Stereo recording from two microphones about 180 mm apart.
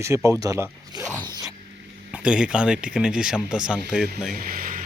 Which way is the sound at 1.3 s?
20° right (ahead or behind).